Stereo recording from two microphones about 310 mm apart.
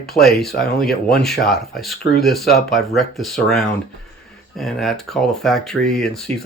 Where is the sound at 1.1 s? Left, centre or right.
Centre.